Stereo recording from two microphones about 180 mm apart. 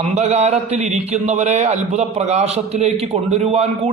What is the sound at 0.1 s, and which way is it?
A man's voice, 35° right (ahead or behind).